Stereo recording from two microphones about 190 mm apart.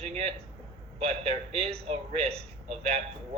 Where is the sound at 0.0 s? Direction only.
35° right (ahead or behind).